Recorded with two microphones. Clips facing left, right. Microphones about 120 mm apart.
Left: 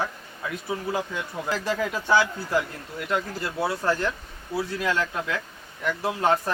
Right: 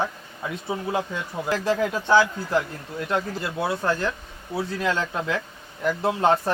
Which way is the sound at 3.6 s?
20° right (ahead or behind).